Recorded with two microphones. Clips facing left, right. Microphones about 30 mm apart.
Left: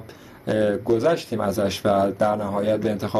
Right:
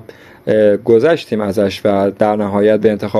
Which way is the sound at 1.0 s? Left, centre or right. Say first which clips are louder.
Right 8 dB; right.